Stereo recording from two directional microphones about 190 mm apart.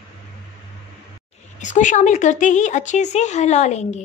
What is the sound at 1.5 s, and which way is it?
Speech, 40° left (ahead or behind).